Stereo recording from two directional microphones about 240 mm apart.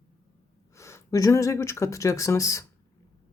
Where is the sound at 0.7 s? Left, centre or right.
Centre.